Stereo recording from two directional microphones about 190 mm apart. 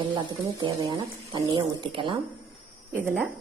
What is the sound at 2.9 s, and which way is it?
Speech, 10° right (ahead or behind).